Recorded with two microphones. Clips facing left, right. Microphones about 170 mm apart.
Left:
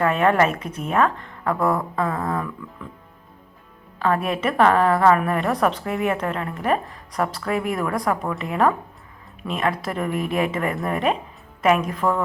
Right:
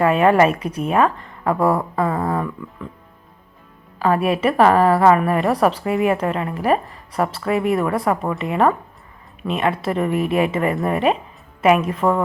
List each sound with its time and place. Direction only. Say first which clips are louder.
0.0 s a woman's voice: right 4 dB; 10° right (ahead or behind)
4.0 s a woman's voice: right 4 dB; 10° right (ahead or behind)
12.0 s speech: right 4 dB; 20° right (ahead or behind)